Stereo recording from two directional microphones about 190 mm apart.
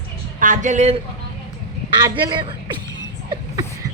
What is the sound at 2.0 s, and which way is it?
Speech, 25° right (ahead or behind).